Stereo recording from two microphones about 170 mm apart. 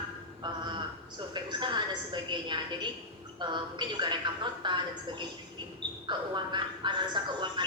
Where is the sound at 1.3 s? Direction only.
25° right (ahead or behind).